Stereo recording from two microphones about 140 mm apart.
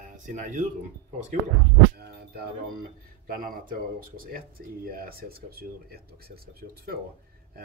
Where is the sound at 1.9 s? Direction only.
90° right.